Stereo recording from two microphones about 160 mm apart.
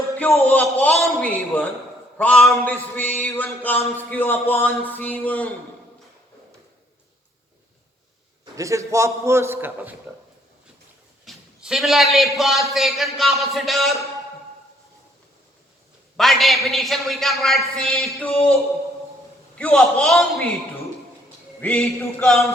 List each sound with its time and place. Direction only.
0.4 s speech: 10° left (ahead or behind)
8.5 s a man's voice: 20° right (ahead or behind)
11.3 s a man's voice: centre (ahead or behind)
16.1 s a man's voice: centre (ahead or behind)
19.5 s a man's voice: 5° left (ahead or behind)
21.6 s a man's voice: 10° left (ahead or behind)